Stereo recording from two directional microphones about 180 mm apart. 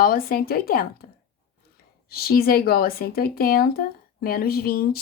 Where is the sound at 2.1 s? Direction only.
55° left (ahead or behind).